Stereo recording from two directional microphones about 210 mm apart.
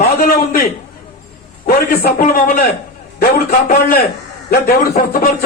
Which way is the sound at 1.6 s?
45° left (ahead or behind).